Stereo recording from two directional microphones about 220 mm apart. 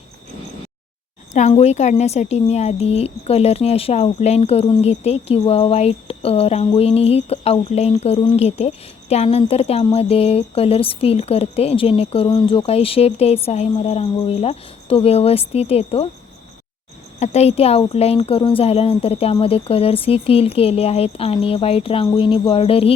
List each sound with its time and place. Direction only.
1.3 s a woman's voice: 30° left (ahead or behind)
17.2 s a woman's voice: 30° left (ahead or behind)